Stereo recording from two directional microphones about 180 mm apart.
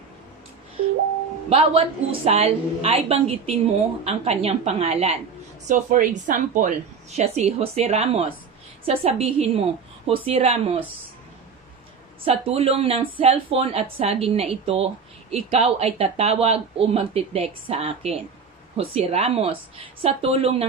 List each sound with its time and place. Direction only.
1.5 s speech: 35° right (ahead or behind)
5.6 s speech: 45° right (ahead or behind); by 10.8 s 30° right (ahead or behind)
12.2 s speech: 35° right (ahead or behind)